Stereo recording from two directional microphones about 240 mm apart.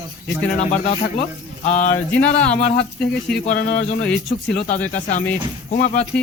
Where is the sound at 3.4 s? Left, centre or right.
Left.